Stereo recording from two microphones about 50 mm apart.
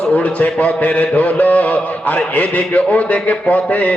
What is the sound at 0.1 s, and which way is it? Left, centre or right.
A man's voice, left.